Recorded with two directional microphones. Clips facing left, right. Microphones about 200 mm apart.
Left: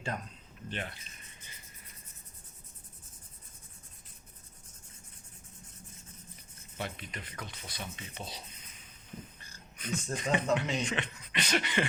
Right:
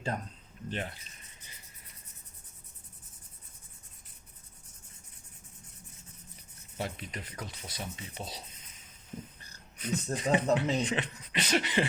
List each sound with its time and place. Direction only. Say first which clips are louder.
0.7 s speech: right 3 dB; 35° right (ahead or behind)
6.7 s speech: right 2 dB; 35° right (ahead or behind)
9.7 s speech: right 3 dB; 35° right (ahead or behind)